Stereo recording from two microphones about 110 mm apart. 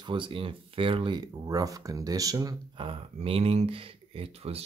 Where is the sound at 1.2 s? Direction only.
35° right (ahead or behind).